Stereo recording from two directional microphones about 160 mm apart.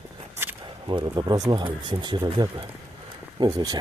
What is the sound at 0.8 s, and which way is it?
Speech, 30° right (ahead or behind).